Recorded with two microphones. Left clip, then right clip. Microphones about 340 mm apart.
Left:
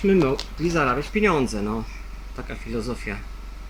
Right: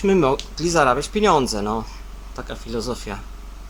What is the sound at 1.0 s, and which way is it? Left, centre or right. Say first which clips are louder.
Speech: right 2 dB; right.